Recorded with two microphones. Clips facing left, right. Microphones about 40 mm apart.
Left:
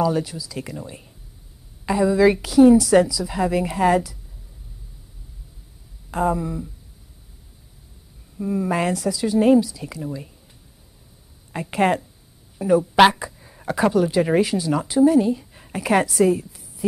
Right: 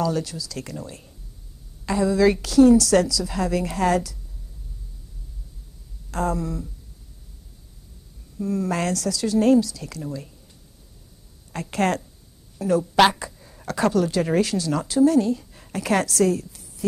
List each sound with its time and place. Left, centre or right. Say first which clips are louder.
0.0 s a woman's voice: left 3 dB; centre
6.0 s a woman's voice: left 3 dB; centre
8.4 s a woman's voice: left 2 dB; centre
11.5 s a woman's voice: left 3 dB; centre